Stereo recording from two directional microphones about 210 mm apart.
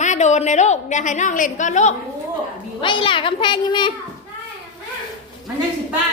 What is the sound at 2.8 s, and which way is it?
A woman's voice, 25° left (ahead or behind).